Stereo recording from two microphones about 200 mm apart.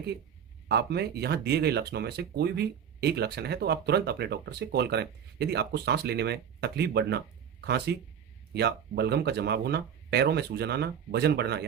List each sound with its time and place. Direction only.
0.7 s speech: 55° right (ahead or behind)